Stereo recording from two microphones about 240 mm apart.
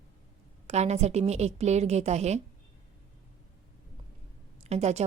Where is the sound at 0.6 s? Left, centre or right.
Right.